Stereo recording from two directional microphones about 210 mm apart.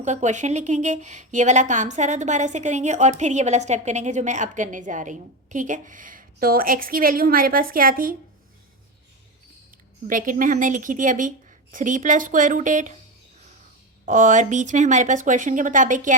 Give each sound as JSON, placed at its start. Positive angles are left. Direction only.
{"t": 0.0, "sound": "a woman's voice", "side_deg": -35}
{"t": 10.1, "sound": "a woman's voice", "side_deg": -40}
{"t": 14.0, "sound": "a woman's voice", "side_deg": -35}